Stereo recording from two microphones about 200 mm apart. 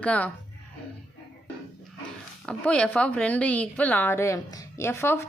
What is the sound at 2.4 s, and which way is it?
A woman's voice, 5° left (ahead or behind).